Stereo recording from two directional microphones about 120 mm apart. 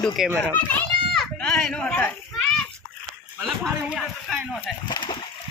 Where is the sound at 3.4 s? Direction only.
Centre (ahead or behind).